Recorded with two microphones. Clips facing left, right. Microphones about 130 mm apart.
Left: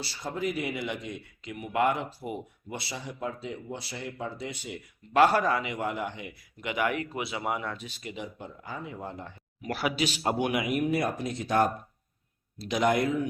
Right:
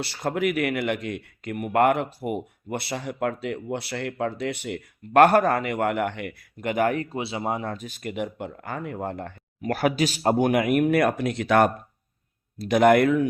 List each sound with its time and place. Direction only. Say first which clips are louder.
0.0 s speech: right 7 dB; 65° right (ahead or behind)
12.5 s speech: right 8 dB; 55° right (ahead or behind)